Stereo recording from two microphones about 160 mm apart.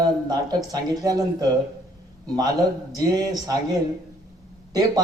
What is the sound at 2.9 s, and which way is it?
Speech, 25° right (ahead or behind).